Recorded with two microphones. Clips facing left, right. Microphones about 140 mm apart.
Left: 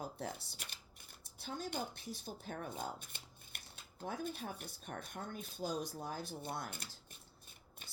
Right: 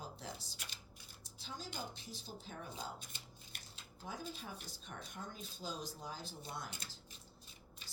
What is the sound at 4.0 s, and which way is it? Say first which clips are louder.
Speech: left 5 dB; 55° left (ahead or behind).